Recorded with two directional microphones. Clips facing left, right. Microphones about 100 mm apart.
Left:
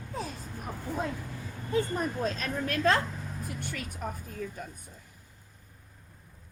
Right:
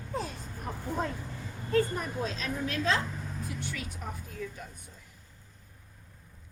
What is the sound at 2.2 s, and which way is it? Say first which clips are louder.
Speech: left 2 dB; 50° left (ahead or behind).